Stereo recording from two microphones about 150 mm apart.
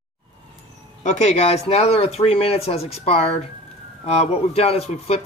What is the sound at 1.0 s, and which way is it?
Speech, 50° left (ahead or behind).